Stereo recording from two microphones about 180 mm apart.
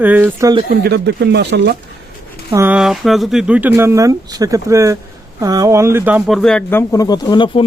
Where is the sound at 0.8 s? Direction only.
70° right (ahead or behind).